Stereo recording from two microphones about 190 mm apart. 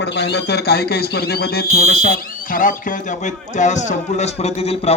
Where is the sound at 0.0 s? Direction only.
60° left (ahead or behind).